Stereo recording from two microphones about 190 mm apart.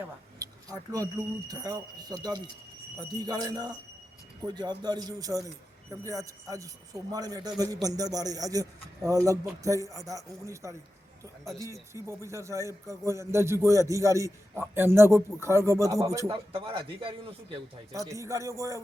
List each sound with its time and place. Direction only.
0.0 s a sound: 20° right (ahead or behind)
1.5 s a man's voice: 20° right (ahead or behind)
16.3 s a man's voice: 30° right (ahead or behind)
17.9 s a man's voice: 15° right (ahead or behind)